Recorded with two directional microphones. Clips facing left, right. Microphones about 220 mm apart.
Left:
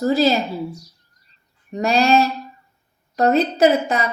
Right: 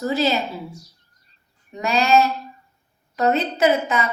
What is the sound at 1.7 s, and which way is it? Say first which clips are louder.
A woman's voice: left 2 dB; 35° left (ahead or behind).